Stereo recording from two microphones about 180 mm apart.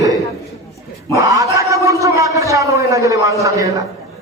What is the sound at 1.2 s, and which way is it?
A man's voice, 20° right (ahead or behind).